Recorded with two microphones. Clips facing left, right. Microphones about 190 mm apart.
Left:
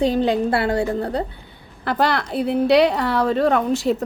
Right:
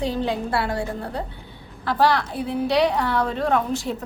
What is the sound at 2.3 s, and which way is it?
A woman's voice, 70° left (ahead or behind).